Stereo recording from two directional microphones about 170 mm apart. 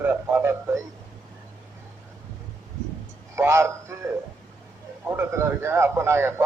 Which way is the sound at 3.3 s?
15° right (ahead or behind).